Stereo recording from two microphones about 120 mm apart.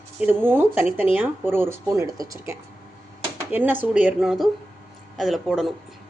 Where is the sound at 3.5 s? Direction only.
15° right (ahead or behind).